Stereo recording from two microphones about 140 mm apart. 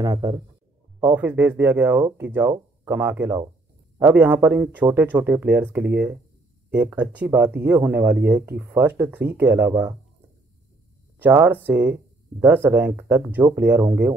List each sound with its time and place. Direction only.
0.0 s speech: 25° right (ahead or behind)
1.0 s speech: 15° right (ahead or behind)
11.1 s speech: 10° right (ahead or behind)